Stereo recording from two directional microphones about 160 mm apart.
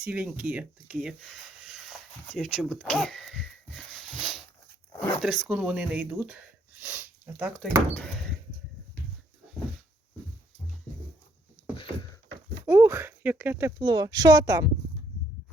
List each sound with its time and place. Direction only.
0.0 s speech: 5° right (ahead or behind)
7.9 s speech: 5° left (ahead or behind)
12.6 s speech: 15° right (ahead or behind)